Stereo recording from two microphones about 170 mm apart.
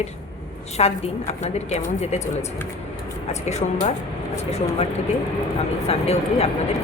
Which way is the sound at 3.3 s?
40° left (ahead or behind).